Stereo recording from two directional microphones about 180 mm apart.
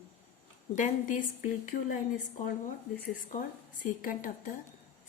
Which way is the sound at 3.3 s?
45° left (ahead or behind).